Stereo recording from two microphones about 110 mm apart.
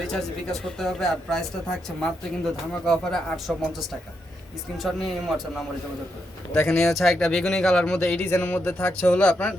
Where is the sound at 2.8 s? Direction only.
5° left (ahead or behind).